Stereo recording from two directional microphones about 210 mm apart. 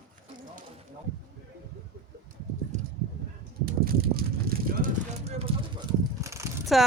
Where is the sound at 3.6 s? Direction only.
45° right (ahead or behind).